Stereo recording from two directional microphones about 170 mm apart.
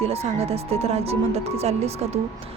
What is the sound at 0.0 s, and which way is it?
A woman's voice, 35° right (ahead or behind).